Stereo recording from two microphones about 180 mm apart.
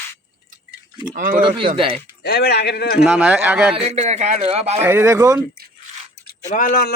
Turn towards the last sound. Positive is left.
turn(degrees=55)  # may be behind; listen again after turning